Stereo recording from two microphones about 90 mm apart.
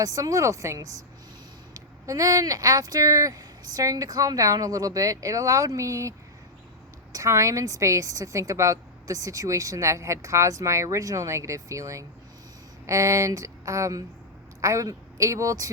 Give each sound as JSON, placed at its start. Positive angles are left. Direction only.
{"t": 0.0, "sound": "a woman's voice", "side_deg": -40}